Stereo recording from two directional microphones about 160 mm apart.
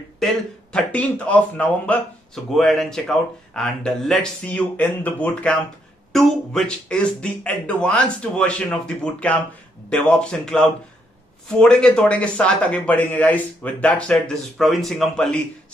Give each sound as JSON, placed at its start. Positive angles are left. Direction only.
{"t": 0.2, "sound": "a man's voice", "side_deg": 5}